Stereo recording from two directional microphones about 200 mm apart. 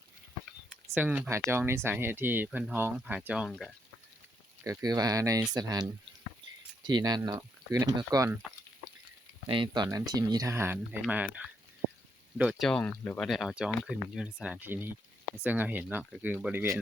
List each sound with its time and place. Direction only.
0.9 s speech: 5° right (ahead or behind)
4.6 s speech: 15° right (ahead or behind)
9.5 s speech: 25° right (ahead or behind)